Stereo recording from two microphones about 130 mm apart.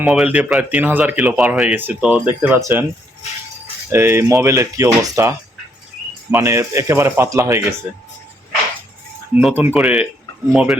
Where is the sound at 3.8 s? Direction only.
20° right (ahead or behind).